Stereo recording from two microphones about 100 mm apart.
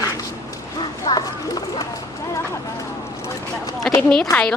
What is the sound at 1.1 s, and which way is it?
Speech, 40° left (ahead or behind).